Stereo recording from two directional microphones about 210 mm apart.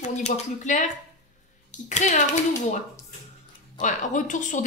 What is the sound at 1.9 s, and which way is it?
Speech, 35° left (ahead or behind).